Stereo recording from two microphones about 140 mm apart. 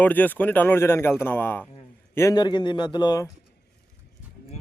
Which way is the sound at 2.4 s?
30° left (ahead or behind).